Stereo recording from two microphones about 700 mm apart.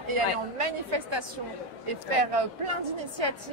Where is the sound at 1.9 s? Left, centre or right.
Right.